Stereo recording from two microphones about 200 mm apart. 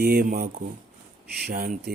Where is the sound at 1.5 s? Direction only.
50° right (ahead or behind).